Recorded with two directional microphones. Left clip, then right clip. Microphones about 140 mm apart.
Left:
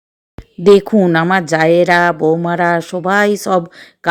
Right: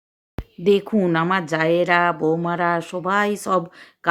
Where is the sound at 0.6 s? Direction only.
40° left (ahead or behind).